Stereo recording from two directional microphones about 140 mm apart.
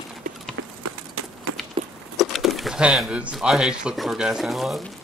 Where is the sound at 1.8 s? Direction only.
40° right (ahead or behind).